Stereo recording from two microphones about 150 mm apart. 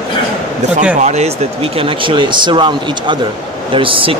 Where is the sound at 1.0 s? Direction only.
45° right (ahead or behind).